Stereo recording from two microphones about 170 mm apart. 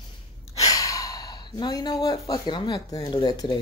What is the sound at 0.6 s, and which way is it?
Speech, 20° left (ahead or behind).